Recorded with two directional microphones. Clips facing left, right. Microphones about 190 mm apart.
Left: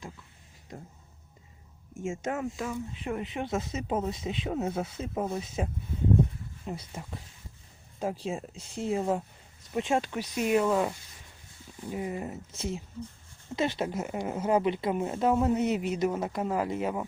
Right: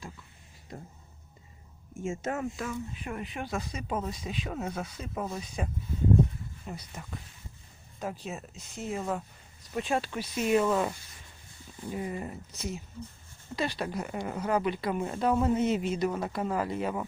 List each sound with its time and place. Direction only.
2.0 s a woman's voice: 10° left (ahead or behind)
2.9 s speech: 25° left (ahead or behind)
6.7 s a woman's voice: 25° left (ahead or behind)
12.5 s a woman's voice: 30° left (ahead or behind)